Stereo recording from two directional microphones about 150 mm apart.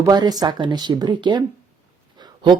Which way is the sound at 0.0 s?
25° right (ahead or behind).